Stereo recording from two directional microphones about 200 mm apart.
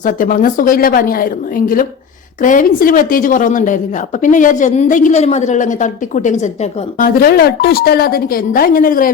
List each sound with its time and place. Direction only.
0.0 s a woman's voice: 40° left (ahead or behind)